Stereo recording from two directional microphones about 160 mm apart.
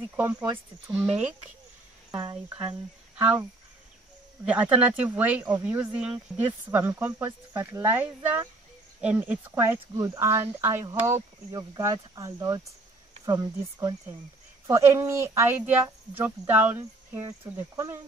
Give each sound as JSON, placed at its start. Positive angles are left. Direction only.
{"t": 0.1, "sound": "speech", "side_deg": -15}
{"t": 2.0, "sound": "speech", "side_deg": -25}
{"t": 3.2, "sound": "speech", "side_deg": -10}
{"t": 4.5, "sound": "speech", "side_deg": -10}